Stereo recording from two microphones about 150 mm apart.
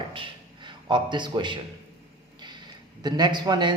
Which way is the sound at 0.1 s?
35° right (ahead or behind).